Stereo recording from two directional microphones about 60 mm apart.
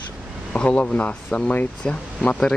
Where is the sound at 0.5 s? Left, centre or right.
Left.